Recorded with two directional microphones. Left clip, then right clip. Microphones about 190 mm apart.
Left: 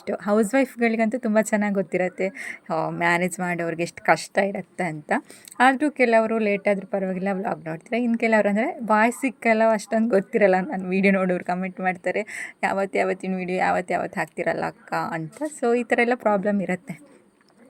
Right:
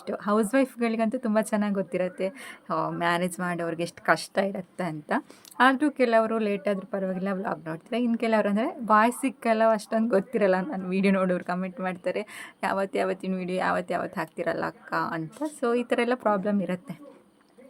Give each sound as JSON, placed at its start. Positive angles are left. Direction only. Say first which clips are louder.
{"t": 0.0, "sound": "speech", "louder": "left 4 dB", "side_deg": 15}